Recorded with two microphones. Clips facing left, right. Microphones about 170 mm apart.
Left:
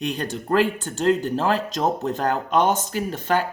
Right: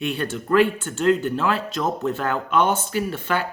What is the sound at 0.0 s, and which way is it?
Speech, 40° left (ahead or behind).